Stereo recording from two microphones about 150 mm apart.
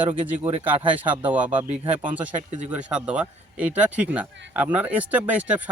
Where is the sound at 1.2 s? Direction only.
10° right (ahead or behind).